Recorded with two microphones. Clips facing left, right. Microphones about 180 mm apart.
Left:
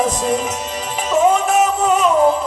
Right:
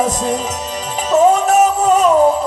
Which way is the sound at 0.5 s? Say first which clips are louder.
Right 1 dB; 40° right (ahead or behind).